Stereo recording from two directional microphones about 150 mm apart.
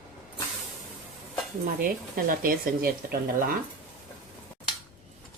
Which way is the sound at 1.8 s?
70° right (ahead or behind).